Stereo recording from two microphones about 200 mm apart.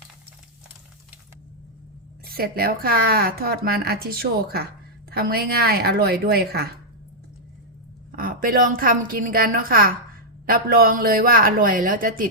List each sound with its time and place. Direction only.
2.2 s speech: 50° right (ahead or behind)
8.1 s speech: 45° right (ahead or behind)